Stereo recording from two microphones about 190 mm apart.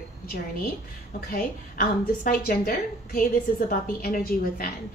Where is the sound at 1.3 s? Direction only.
50° left (ahead or behind).